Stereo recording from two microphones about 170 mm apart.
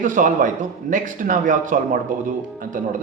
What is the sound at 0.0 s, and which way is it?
A man's voice, 50° right (ahead or behind).